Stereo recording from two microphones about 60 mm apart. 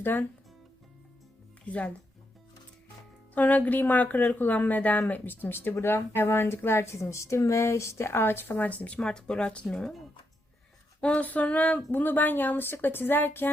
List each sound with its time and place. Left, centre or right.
0.0 s speech: left
1.6 s speech: left
3.3 s a woman's voice: left
9.0 s speech: centre
11.0 s a woman's voice: left